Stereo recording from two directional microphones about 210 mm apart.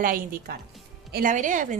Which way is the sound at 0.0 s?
40° right (ahead or behind).